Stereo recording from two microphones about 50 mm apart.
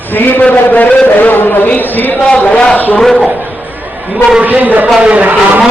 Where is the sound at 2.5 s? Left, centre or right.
Left.